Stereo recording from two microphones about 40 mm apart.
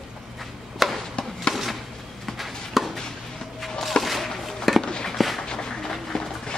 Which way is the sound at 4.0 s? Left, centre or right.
Centre.